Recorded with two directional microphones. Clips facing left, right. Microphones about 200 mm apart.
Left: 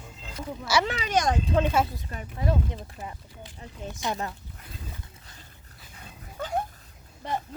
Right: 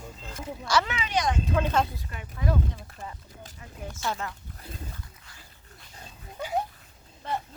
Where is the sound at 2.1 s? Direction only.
30° left (ahead or behind).